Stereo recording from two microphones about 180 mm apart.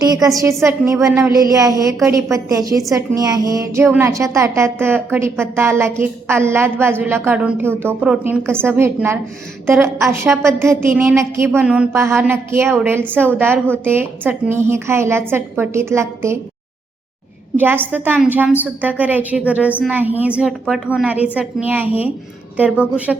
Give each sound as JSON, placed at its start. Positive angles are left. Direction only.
{"t": 0.0, "sound": "a woman's voice", "side_deg": -20}
{"t": 17.6, "sound": "a woman's voice", "side_deg": -10}